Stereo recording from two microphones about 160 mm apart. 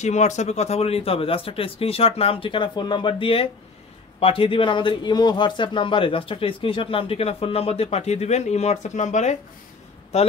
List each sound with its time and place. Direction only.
0.0 s speech: 45° left (ahead or behind)